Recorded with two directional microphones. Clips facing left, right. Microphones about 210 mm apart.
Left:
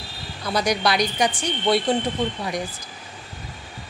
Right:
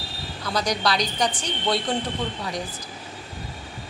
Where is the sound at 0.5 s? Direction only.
10° left (ahead or behind).